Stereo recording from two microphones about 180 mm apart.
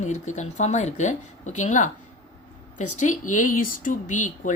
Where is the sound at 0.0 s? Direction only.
40° left (ahead or behind).